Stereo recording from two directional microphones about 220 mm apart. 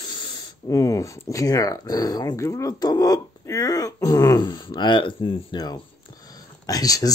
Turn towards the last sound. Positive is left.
turn(degrees=15)  # may be behind; listen again after turning